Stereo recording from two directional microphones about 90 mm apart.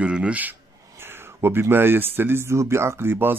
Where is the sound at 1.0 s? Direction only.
25° right (ahead or behind).